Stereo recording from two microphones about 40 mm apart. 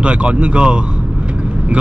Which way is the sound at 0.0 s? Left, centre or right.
Right.